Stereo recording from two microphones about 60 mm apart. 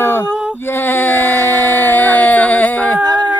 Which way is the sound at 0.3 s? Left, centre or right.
Centre.